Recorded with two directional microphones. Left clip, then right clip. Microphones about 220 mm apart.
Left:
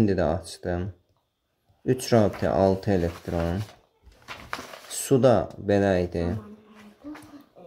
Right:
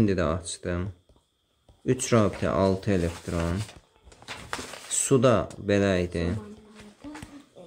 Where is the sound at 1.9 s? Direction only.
15° left (ahead or behind).